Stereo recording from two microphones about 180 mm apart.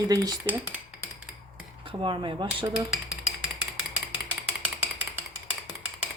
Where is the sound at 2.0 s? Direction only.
25° right (ahead or behind).